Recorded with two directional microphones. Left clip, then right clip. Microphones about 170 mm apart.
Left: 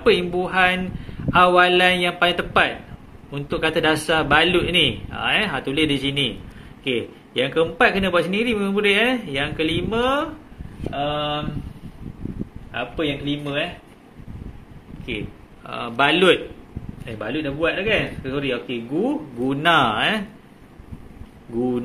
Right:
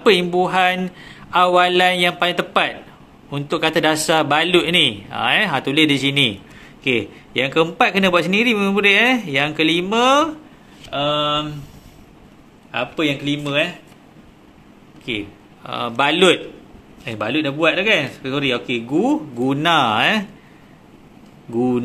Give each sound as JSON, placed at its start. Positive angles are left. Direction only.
{"t": 0.0, "sound": "a man's voice", "side_deg": -40}
{"t": 12.7, "sound": "speech", "side_deg": -40}
{"t": 15.0, "sound": "speech", "side_deg": -30}
{"t": 17.0, "sound": "a man's voice", "side_deg": -45}